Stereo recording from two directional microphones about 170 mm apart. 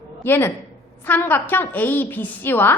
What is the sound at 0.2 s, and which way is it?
A woman's voice, 15° left (ahead or behind).